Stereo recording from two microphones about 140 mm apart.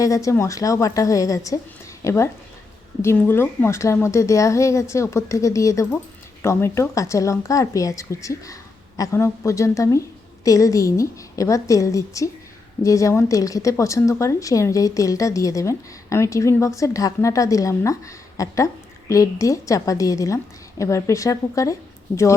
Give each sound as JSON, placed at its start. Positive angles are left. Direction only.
{"t": 0.0, "sound": "a woman's voice", "side_deg": 25}